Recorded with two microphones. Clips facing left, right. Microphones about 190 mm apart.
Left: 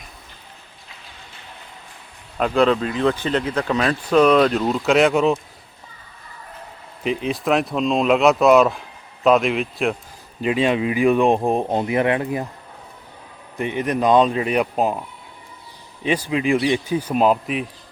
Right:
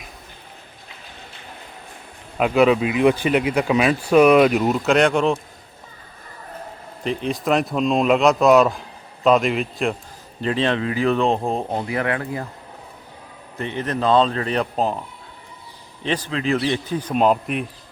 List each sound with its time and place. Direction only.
2.4 s speech: 5° right (ahead or behind)
4.9 s speech: centre (ahead or behind)
7.0 s speech: 5° left (ahead or behind); by 12.5 s 20° left (ahead or behind)
13.6 s speech: 15° left (ahead or behind)
16.0 s speech: 10° left (ahead or behind)